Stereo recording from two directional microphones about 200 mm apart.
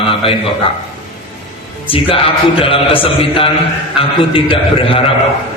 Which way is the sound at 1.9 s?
30° left (ahead or behind).